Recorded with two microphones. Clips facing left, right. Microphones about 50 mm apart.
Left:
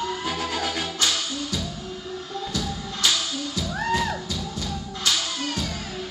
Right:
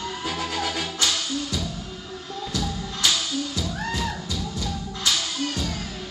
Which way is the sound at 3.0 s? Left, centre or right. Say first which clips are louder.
Right 1 dB; centre.